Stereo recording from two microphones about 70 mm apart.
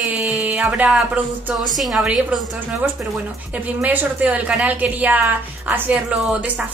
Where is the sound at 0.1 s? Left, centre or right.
Right.